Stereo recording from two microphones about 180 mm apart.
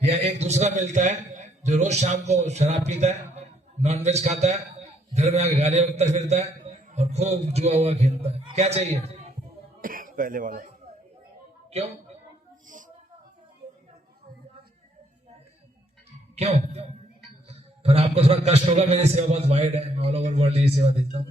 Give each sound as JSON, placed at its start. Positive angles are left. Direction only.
{"t": 0.0, "sound": "a man's voice", "side_deg": -35}
{"t": 9.8, "sound": "speech", "side_deg": -50}
{"t": 16.3, "sound": "a sound", "side_deg": -35}
{"t": 17.5, "sound": "a man's voice", "side_deg": -35}